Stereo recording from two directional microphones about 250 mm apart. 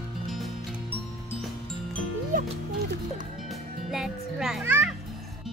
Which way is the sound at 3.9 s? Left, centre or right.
Centre.